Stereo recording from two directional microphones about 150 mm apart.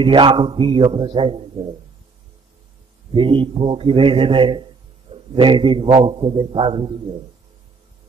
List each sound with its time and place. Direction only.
0.0 s a man's voice: 35° right (ahead or behind)
3.1 s a man's voice: 35° right (ahead or behind)